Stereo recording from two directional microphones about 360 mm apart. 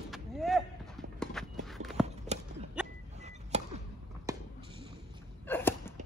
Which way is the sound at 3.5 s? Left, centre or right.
Centre.